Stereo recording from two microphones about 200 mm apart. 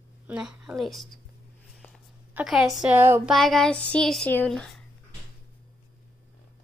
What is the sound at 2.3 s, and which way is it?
Speech, centre (ahead or behind).